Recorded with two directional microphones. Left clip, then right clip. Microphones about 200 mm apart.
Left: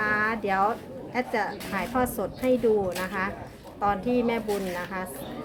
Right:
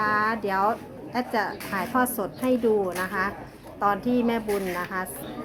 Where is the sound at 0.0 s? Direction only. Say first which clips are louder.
Right 2 dB; 25° right (ahead or behind).